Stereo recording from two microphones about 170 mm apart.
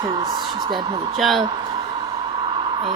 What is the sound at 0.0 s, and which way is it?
Speech, 25° right (ahead or behind).